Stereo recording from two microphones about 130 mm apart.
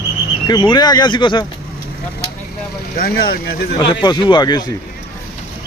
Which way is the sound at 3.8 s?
35° left (ahead or behind).